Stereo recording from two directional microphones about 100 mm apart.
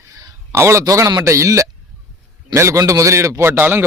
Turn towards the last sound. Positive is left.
turn(degrees=-20)  # may be behind; listen again after turning